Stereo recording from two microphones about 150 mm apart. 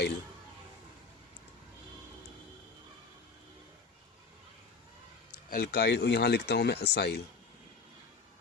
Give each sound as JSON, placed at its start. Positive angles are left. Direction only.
{"t": 5.5, "sound": "speech", "side_deg": 90}